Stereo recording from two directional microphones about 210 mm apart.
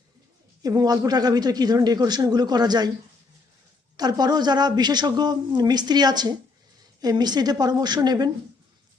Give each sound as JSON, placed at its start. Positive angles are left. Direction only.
{"t": 0.6, "sound": "speech", "side_deg": -20}
{"t": 3.9, "sound": "speech", "side_deg": -20}